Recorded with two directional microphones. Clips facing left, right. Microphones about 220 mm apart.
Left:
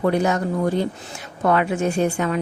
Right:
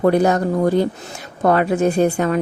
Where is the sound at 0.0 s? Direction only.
40° right (ahead or behind).